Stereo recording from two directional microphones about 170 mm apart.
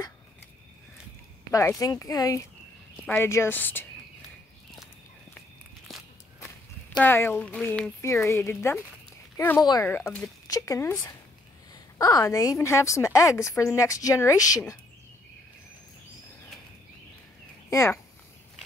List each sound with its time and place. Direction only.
1.8 s a woman's voice: 20° left (ahead or behind)
7.0 s a woman's voice: 10° left (ahead or behind)
17.6 s speech: 15° left (ahead or behind)